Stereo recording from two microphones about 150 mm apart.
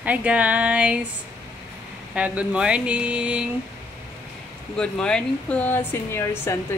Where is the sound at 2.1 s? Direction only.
10° right (ahead or behind).